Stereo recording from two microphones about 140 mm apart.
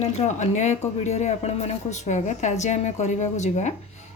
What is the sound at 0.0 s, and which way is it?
A woman's voice, 55° left (ahead or behind).